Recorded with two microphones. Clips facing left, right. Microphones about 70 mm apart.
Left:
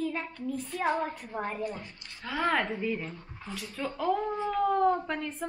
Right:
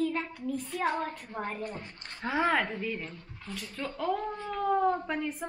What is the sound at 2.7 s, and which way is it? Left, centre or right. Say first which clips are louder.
Speech: left 3 dB; centre.